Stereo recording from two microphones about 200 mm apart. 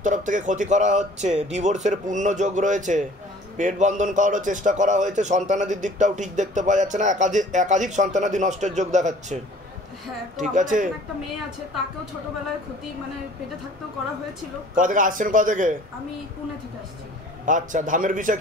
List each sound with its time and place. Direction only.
0.0 s a man's voice: 40° right (ahead or behind)
14.8 s a man's voice: 40° right (ahead or behind)
17.5 s a man's voice: 40° right (ahead or behind)